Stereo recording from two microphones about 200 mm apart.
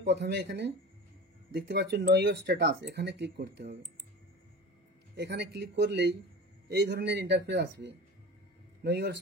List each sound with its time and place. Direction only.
0.0 s speech: 55° right (ahead or behind)
5.1 s speech: 55° right (ahead or behind)